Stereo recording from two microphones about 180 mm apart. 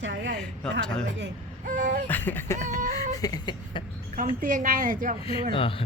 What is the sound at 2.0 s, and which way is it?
Speech, 10° left (ahead or behind).